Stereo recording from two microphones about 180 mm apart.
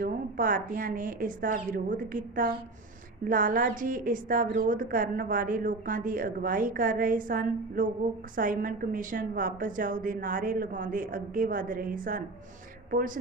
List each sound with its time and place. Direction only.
0.0 s a woman's voice: 50° right (ahead or behind)